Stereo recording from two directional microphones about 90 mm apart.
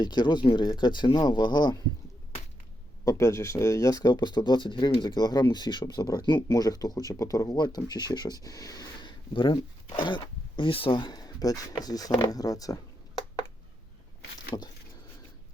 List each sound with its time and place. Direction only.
0.0 s speech: 55° left (ahead or behind)
3.0 s speech: 35° left (ahead or behind); by 4.9 s 60° left (ahead or behind)
4.9 s speech: 50° left (ahead or behind)
7.5 s speech: 50° left (ahead or behind)